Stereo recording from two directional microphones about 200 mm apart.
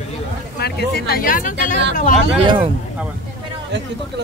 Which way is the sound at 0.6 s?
55° left (ahead or behind).